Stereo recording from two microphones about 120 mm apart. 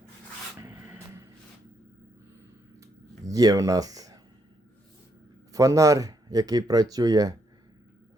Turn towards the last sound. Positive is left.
turn(degrees=-30)  # may be behind; listen again after turning